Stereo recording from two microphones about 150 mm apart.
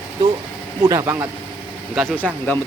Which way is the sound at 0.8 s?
20° right (ahead or behind).